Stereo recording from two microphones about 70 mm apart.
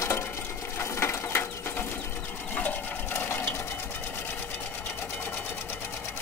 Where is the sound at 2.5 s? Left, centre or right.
Left.